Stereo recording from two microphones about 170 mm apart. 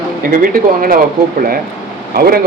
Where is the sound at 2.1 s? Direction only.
60° right (ahead or behind).